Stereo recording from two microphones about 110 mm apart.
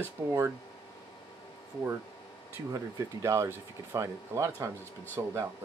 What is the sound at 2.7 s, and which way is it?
Speech, 30° right (ahead or behind).